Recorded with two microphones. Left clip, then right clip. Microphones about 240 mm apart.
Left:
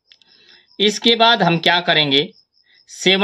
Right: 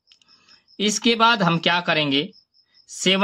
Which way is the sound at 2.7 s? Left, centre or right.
Right.